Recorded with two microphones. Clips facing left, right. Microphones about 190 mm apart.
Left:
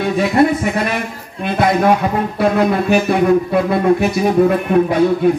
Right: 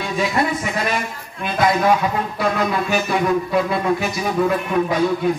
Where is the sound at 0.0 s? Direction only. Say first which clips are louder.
Left 7 dB; 55° left (ahead or behind).